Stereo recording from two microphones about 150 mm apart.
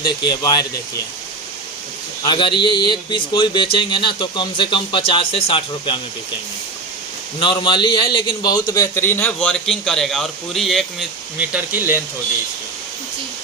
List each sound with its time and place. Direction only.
0.0 s a man's voice: 30° left (ahead or behind)
2.2 s speech: 30° left (ahead or behind)
7.3 s a man's voice: 30° left (ahead or behind); by 10.8 s centre (ahead or behind)
11.3 s speech: 10° right (ahead or behind)